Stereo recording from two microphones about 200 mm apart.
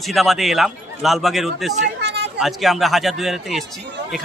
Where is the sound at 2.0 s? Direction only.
60° right (ahead or behind).